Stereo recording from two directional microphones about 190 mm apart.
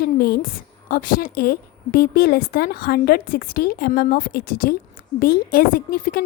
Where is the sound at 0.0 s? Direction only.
55° left (ahead or behind).